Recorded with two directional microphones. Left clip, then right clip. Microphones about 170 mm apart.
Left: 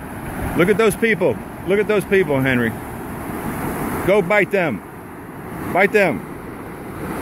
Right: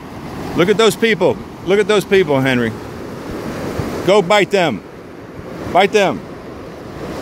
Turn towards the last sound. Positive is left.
turn(degrees=-15)  # may be behind; listen again after turning